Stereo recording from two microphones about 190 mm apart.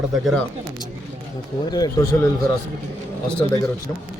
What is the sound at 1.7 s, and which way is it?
Speech, 20° left (ahead or behind).